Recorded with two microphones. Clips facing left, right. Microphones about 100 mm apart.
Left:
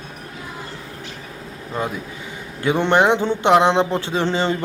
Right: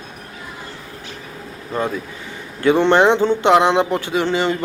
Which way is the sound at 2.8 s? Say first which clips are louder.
Right 1 dB; 15° left (ahead or behind).